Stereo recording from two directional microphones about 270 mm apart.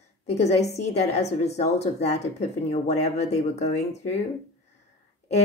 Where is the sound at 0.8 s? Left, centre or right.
Left.